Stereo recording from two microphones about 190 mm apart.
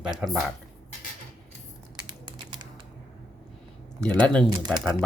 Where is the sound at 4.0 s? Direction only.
5° left (ahead or behind).